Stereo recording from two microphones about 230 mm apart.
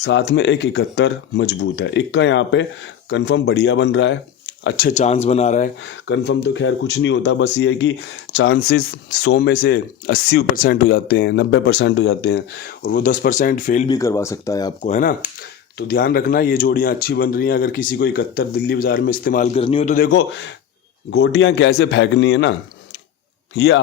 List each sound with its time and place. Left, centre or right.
0.0 s speech: left
4.9 s speech: left
5.8 s speech: left
13.8 s speech: centre
14.8 s speech: left
15.9 s speech: left
23.6 s speech: left